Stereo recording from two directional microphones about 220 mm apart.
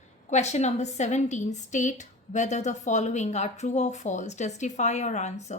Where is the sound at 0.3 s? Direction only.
30° left (ahead or behind).